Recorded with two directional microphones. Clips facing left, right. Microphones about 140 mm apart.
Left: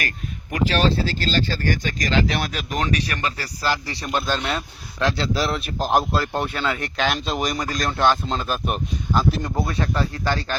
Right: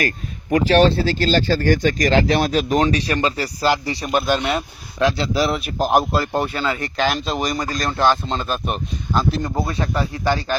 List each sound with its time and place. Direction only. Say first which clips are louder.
0.5 s speech: right 6 dB; 35° right (ahead or behind)
2.1 s speech: right 3 dB; 35° right (ahead or behind); by 10.6 s 10° right (ahead or behind)